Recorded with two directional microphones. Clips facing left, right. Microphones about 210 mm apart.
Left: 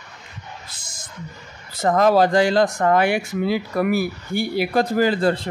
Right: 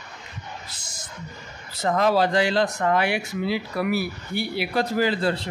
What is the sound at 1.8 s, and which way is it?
Speech, 50° left (ahead or behind).